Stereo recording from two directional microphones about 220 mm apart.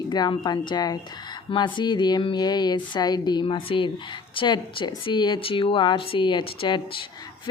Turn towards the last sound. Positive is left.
turn(degrees=20)  # may be behind; listen again after turning